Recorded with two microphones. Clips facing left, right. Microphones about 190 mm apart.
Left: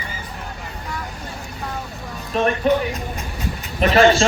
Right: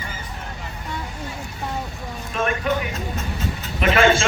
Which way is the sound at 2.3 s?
35° left (ahead or behind).